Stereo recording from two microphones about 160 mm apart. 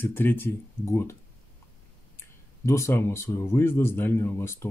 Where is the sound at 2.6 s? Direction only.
15° left (ahead or behind).